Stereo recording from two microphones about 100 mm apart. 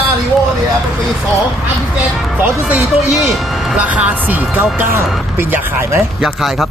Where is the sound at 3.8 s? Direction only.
15° right (ahead or behind).